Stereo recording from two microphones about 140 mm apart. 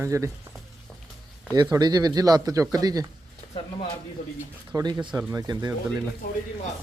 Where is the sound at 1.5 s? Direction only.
30° right (ahead or behind).